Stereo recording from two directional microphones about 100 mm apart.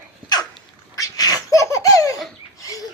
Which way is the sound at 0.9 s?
35° left (ahead or behind).